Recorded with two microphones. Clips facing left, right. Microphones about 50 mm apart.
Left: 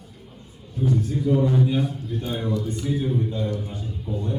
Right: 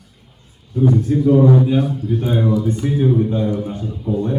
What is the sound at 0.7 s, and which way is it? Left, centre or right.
Speech, right.